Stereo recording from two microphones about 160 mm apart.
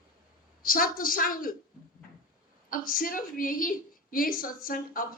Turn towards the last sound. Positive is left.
turn(degrees=60)  # may be behind; listen again after turning